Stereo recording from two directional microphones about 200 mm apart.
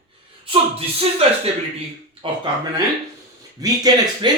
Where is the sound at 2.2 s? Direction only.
25° right (ahead or behind).